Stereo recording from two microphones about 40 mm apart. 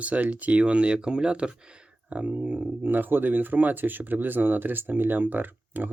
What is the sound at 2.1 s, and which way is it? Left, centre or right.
Speech, right.